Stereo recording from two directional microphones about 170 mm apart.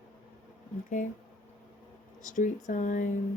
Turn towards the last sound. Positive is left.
turn(degrees=50)  # may be behind; listen again after turning